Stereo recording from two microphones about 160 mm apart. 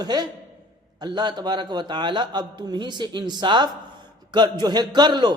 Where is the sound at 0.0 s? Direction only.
25° right (ahead or behind).